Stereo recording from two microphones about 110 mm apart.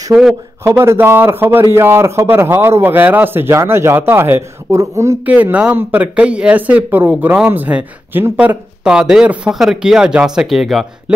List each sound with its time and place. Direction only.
0.1 s speech: 5° right (ahead or behind)
0.7 s a man's voice: 20° right (ahead or behind)
5.2 s speech: 15° right (ahead or behind)